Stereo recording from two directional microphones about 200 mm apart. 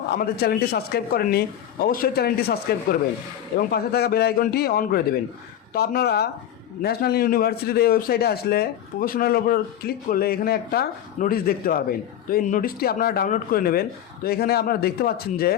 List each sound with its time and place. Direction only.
0.3 s a man's voice: 50° left (ahead or behind)